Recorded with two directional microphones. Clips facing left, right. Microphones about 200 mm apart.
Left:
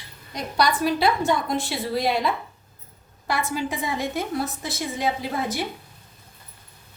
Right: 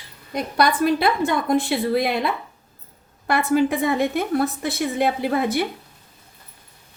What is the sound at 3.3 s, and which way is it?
A woman's voice, 60° right (ahead or behind).